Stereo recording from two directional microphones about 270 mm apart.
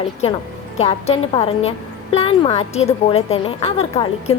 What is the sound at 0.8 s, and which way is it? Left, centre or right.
A woman's voice, left.